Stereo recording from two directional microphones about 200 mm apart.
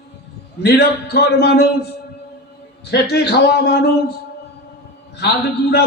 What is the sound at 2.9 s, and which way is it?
Speech, 55° left (ahead or behind).